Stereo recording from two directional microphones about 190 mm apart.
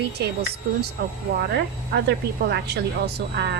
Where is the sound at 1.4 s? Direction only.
60° right (ahead or behind).